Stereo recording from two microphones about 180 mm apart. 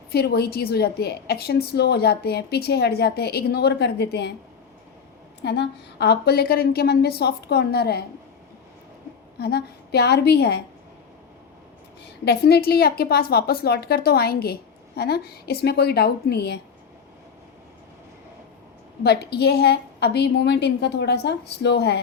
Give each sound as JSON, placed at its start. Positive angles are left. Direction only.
{"t": 0.1, "sound": "a woman's voice", "side_deg": 60}
{"t": 5.4, "sound": "a woman's voice", "side_deg": 70}
{"t": 9.4, "sound": "a woman's voice", "side_deg": 65}
{"t": 12.2, "sound": "a woman's voice", "side_deg": 65}
{"t": 19.0, "sound": "a woman's voice", "side_deg": 65}